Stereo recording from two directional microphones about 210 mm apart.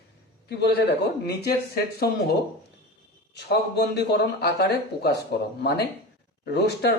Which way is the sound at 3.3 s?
50° left (ahead or behind).